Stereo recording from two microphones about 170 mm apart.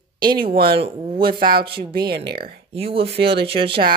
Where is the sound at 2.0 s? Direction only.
65° right (ahead or behind).